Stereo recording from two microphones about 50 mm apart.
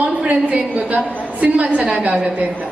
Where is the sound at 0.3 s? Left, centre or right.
Right.